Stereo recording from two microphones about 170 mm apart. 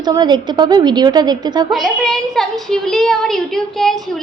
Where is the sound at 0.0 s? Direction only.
25° right (ahead or behind).